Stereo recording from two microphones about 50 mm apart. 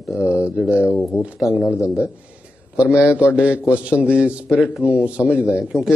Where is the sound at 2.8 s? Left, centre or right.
Right.